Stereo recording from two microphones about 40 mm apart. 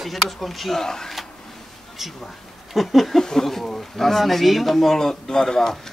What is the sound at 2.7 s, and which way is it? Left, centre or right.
Speech, centre.